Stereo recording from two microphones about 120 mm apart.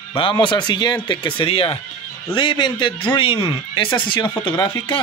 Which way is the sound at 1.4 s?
50° left (ahead or behind).